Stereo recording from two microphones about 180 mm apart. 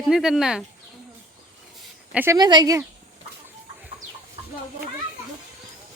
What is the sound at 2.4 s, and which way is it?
Speech, 20° right (ahead or behind).